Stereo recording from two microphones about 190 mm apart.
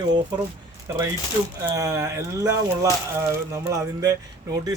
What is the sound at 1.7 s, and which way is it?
Speech, 15° right (ahead or behind).